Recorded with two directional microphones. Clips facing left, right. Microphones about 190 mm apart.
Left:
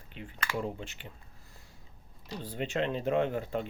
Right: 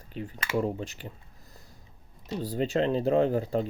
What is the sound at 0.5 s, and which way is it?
Speech, 40° right (ahead or behind).